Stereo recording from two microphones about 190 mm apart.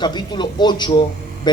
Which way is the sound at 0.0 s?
25° left (ahead or behind).